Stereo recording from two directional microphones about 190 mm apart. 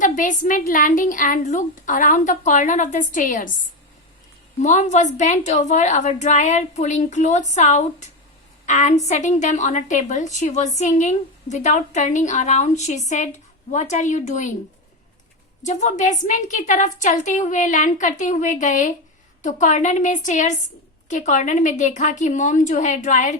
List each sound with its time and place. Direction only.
0.0 s a woman's voice: 45° left (ahead or behind)
4.6 s a woman's voice: 40° left (ahead or behind)
15.6 s a woman's voice: 40° left (ahead or behind)